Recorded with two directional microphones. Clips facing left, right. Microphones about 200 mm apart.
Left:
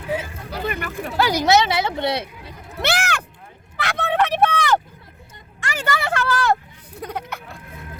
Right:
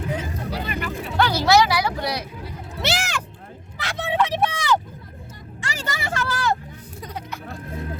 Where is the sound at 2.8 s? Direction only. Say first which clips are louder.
Left 3 dB; 55° left (ahead or behind).